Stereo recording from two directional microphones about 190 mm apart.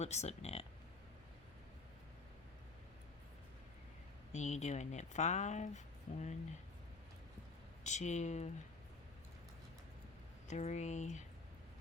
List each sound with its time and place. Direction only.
0.0 s speech: 35° left (ahead or behind)
4.3 s speech: 35° left (ahead or behind)
7.9 s speech: 40° left (ahead or behind)
10.5 s speech: 35° left (ahead or behind)